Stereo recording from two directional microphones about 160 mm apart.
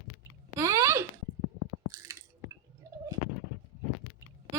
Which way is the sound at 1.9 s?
20° right (ahead or behind).